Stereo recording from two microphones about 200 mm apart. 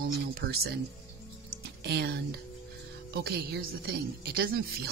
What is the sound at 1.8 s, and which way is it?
Speech, 55° right (ahead or behind).